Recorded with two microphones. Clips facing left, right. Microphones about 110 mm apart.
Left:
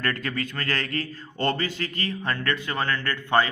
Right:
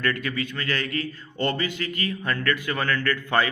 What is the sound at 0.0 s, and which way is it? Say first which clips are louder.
A man's voice: right 1 dB; 35° left (ahead or behind).